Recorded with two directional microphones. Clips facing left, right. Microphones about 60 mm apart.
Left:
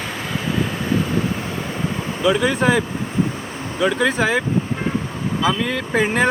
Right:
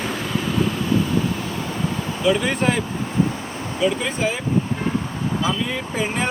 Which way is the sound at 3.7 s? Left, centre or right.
Left.